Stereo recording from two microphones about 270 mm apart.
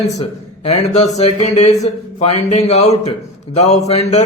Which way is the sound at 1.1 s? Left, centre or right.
Left.